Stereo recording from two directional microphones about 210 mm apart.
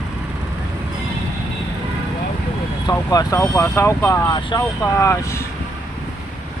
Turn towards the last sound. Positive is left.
turn(degrees=15)  # may be behind; listen again after turning